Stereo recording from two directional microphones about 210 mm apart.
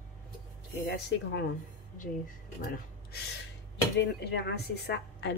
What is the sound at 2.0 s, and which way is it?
Speech, 40° left (ahead or behind).